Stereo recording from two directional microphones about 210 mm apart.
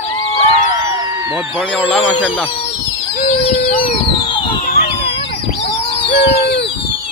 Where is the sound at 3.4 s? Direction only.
25° left (ahead or behind).